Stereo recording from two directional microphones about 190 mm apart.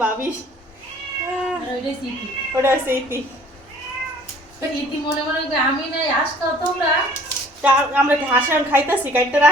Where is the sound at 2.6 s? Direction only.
15° right (ahead or behind).